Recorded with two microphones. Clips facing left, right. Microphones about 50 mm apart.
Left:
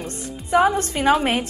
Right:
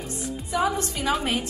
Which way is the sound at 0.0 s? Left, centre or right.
Left.